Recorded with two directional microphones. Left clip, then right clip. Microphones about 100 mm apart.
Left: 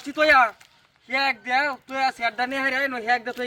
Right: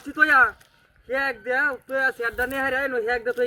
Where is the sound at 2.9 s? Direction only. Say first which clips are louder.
Even; 30° left (ahead or behind).